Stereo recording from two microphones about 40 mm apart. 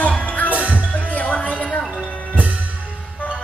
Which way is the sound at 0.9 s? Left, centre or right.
Left.